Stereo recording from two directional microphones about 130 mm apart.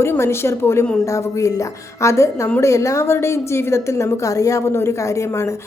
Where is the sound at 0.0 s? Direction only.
20° left (ahead or behind).